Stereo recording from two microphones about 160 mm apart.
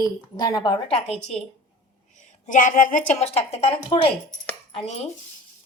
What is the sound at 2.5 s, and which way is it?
A woman's voice, 55° left (ahead or behind).